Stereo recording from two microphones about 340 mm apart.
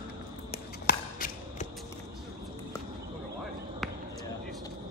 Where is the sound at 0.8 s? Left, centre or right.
Left.